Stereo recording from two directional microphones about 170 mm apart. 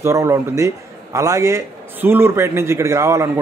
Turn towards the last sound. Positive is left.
turn(degrees=-15)  # may be behind; listen again after turning